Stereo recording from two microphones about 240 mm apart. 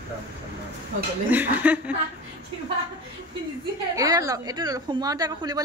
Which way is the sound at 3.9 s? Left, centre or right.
Centre.